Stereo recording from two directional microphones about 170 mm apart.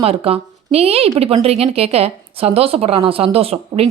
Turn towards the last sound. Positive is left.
turn(degrees=-35)  # may be behind; listen again after turning